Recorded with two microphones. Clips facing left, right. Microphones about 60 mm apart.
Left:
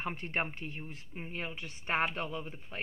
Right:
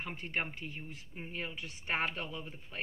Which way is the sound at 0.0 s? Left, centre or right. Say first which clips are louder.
Left 3 dB; left.